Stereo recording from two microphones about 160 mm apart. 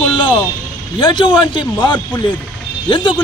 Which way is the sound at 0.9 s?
30° left (ahead or behind).